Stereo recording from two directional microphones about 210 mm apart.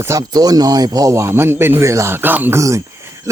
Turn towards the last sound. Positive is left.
turn(degrees=-15)  # may be behind; listen again after turning